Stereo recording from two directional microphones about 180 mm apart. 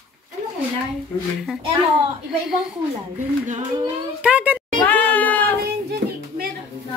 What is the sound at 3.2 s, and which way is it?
Speech, 45° right (ahead or behind).